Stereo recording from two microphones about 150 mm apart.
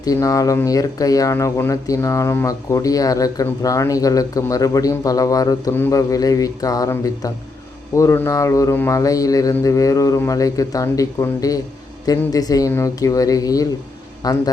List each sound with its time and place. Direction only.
0.0 s speech: 25° left (ahead or behind)